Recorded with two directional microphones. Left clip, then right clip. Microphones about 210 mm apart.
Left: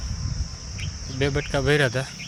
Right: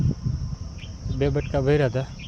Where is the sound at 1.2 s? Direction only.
20° right (ahead or behind).